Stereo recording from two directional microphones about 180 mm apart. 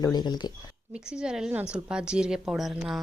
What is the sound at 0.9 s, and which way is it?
A woman's voice, 5° right (ahead or behind).